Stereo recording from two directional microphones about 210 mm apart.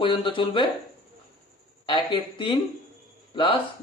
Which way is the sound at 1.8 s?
25° left (ahead or behind).